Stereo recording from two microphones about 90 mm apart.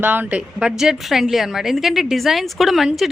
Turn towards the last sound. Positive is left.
turn(degrees=0)  # may be behind; listen again after turning